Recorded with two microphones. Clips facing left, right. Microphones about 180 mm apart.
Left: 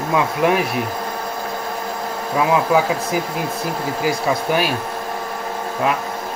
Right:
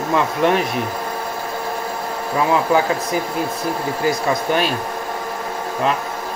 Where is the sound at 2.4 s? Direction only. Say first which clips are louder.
Even; 5° left (ahead or behind).